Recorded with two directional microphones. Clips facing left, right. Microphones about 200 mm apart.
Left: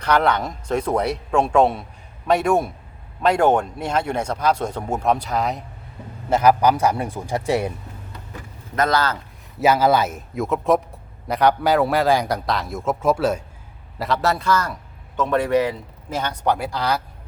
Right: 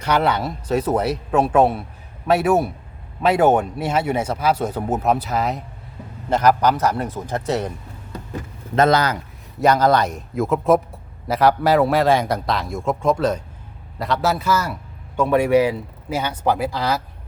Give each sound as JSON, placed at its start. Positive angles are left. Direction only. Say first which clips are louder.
{"t": 0.0, "sound": "a man's voice", "louder": "even", "side_deg": -5}
{"t": 8.7, "sound": "a man's voice", "louder": "right 4 dB", "side_deg": -25}
{"t": 9.6, "sound": "a man's voice", "louder": "right 1 dB", "side_deg": 5}